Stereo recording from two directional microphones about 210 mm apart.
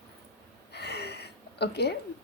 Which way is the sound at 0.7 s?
50° left (ahead or behind).